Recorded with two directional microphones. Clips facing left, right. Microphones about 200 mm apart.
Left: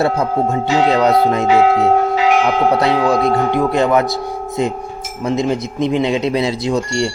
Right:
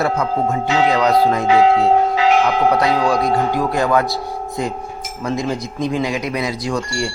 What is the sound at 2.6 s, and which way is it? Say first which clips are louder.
Speech: left 2 dB; 25° left (ahead or behind).